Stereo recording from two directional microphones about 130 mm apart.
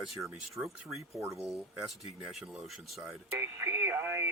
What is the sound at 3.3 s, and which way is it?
Radio, 20° right (ahead or behind).